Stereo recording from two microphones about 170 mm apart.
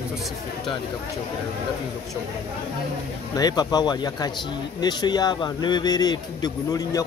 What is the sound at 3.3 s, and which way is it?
A man's voice, 25° left (ahead or behind).